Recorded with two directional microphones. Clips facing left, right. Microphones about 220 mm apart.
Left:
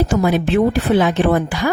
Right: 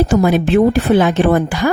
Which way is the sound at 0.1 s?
45° right (ahead or behind).